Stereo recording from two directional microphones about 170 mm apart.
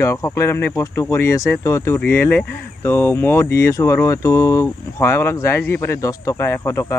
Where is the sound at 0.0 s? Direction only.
15° left (ahead or behind).